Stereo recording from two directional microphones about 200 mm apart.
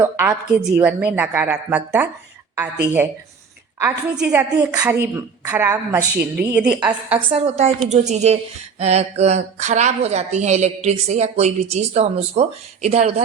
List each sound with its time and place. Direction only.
0.0 s a woman's voice: 10° right (ahead or behind)
7.3 s speech: 30° right (ahead or behind)